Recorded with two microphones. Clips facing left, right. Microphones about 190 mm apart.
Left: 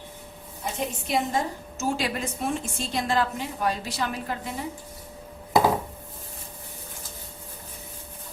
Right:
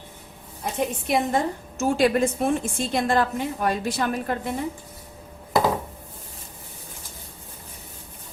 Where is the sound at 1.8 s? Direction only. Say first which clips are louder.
Right 8 dB; 55° right (ahead or behind).